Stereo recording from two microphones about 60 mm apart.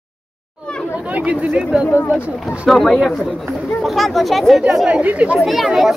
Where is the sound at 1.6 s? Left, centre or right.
Centre.